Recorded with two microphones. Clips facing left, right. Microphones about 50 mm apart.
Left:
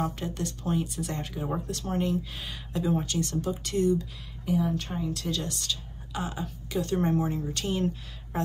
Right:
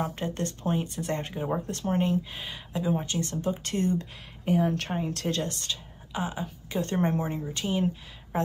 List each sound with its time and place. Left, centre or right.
0.0 s speech: right; by 3.1 s centre
3.1 s a woman's voice: right
6.8 s speech: right
7.4 s speech: centre